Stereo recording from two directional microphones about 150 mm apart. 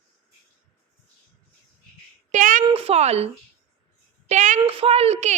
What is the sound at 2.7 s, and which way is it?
Speech, 40° right (ahead or behind).